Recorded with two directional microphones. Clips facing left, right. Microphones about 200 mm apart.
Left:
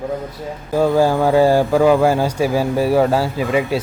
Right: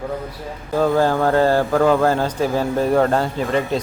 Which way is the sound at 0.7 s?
10° left (ahead or behind).